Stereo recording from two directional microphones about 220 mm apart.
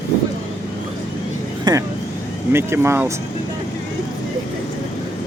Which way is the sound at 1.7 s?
20° right (ahead or behind).